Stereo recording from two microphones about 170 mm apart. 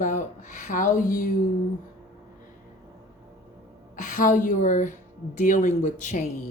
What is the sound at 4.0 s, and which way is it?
A woman's voice, 50° left (ahead or behind).